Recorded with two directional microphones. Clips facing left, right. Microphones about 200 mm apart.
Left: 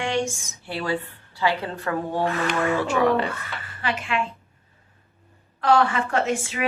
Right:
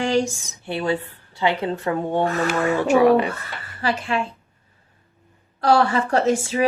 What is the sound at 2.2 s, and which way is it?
Speech, 45° right (ahead or behind).